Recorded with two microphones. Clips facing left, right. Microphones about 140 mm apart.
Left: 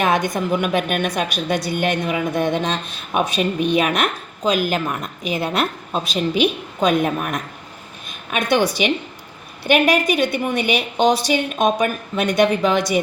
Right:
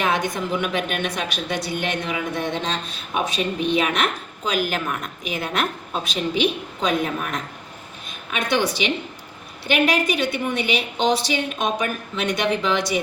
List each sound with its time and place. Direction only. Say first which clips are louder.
0.0 s a woman's voice: left 4 dB; 45° left (ahead or behind)
6.7 s a woman's voice: left 7 dB; 50° left (ahead or behind)
8.3 s a woman's voice: left 4 dB; 45° left (ahead or behind)
9.6 s a woman's voice: left 4 dB; 50° left (ahead or behind)